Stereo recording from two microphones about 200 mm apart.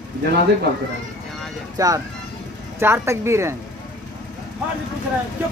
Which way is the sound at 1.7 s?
15° right (ahead or behind).